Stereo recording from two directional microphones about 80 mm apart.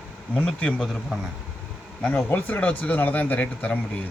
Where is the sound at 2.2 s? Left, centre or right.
Left.